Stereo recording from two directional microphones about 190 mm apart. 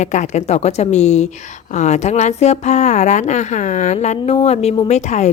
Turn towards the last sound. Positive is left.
turn(degrees=35)  # may be behind; listen again after turning